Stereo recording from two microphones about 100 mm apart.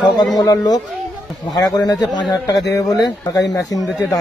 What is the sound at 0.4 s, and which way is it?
Speech, 35° left (ahead or behind).